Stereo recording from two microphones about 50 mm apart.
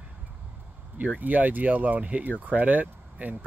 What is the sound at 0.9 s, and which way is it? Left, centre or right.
Speech, right.